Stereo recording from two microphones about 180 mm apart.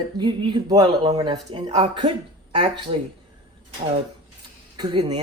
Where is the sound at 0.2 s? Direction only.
25° right (ahead or behind).